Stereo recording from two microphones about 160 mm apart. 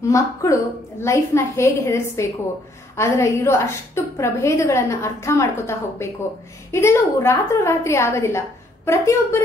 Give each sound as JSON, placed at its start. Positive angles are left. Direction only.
{"t": 0.1, "sound": "a woman's voice", "side_deg": 20}